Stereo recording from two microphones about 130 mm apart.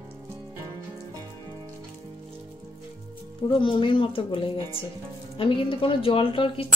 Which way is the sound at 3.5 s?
40° left (ahead or behind).